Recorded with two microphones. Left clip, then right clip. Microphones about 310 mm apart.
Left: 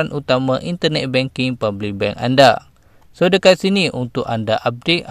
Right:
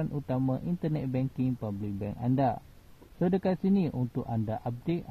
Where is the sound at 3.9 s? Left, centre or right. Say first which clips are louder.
Left 14 dB; left.